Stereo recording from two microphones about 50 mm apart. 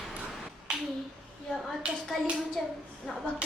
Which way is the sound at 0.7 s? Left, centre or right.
Centre.